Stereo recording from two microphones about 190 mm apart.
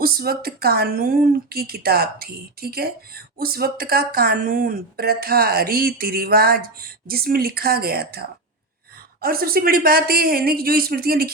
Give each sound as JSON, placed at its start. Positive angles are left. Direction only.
{"t": 0.0, "sound": "speech", "side_deg": -50}